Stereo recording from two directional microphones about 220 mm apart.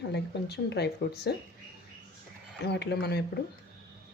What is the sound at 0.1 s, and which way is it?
Speech, 50° left (ahead or behind).